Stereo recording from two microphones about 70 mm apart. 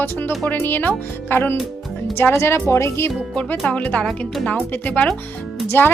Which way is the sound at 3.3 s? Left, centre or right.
Centre.